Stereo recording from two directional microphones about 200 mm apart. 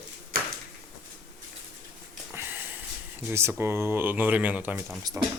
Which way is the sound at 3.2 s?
10° right (ahead or behind).